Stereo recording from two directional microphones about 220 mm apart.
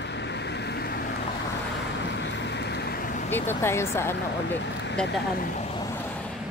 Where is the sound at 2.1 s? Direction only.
50° left (ahead or behind).